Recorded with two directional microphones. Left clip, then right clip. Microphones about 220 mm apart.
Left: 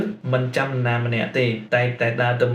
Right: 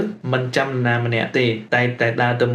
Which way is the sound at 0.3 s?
50° right (ahead or behind).